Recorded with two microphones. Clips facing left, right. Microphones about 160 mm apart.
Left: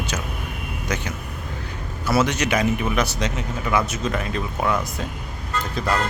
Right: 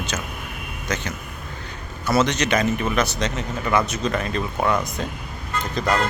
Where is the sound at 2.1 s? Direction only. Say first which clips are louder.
Right 1 dB; 10° left (ahead or behind).